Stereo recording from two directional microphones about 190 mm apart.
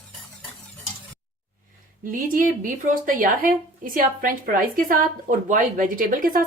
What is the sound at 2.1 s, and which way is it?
A woman's voice, 45° right (ahead or behind).